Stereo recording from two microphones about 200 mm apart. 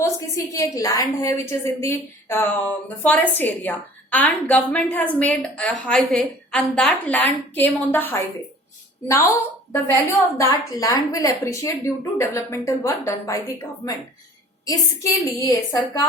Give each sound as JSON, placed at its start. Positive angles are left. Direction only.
{"t": 0.0, "sound": "a woman's voice", "side_deg": 15}
{"t": 14.6, "sound": "a woman's voice", "side_deg": 15}